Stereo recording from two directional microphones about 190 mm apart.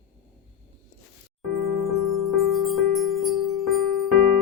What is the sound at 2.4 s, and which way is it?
Music, centre (ahead or behind).